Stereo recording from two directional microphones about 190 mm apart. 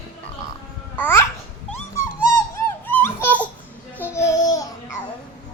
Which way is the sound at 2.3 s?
10° left (ahead or behind).